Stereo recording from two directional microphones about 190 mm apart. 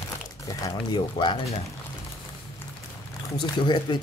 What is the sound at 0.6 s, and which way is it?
Speech, 25° left (ahead or behind).